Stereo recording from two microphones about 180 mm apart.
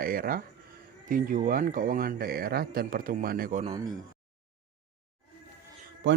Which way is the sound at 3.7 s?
20° right (ahead or behind).